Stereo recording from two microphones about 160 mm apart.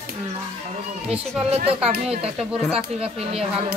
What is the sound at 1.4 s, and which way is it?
Speech, 40° right (ahead or behind).